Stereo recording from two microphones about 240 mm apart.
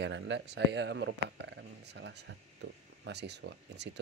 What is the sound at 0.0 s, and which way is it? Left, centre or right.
Speech, right.